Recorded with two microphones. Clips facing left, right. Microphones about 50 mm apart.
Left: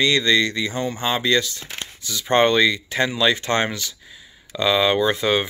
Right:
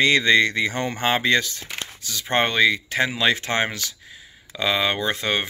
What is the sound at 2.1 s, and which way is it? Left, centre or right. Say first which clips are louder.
Speech: left 5 dB; centre.